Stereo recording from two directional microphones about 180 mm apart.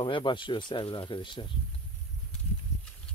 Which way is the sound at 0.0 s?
25° left (ahead or behind).